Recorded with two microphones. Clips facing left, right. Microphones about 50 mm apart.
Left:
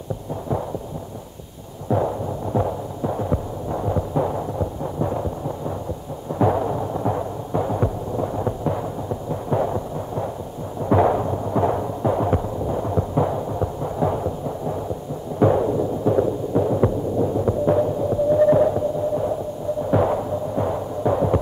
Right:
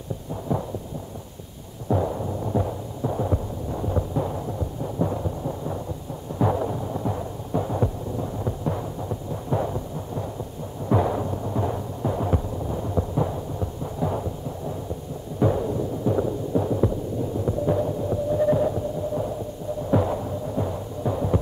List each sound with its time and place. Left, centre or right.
1.9 s throbbing: centre
6.6 s a sound: left
7.8 s heart sounds: left
10.9 s a sound: left
11.5 s music: left
15.3 s music: left
17.5 s hum: left
19.9 s throbbing: left